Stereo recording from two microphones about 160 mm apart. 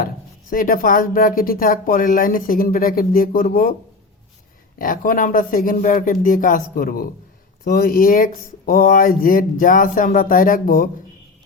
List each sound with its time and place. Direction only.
0.5 s speech: 60° left (ahead or behind)
4.8 s speech: 60° left (ahead or behind)